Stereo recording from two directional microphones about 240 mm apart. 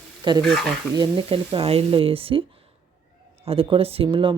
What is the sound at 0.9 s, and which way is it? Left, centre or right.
Speech, centre.